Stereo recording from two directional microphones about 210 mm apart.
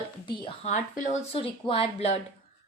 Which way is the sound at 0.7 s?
35° left (ahead or behind).